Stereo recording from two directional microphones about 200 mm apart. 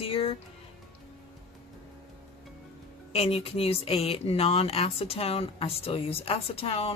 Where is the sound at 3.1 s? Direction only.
30° left (ahead or behind).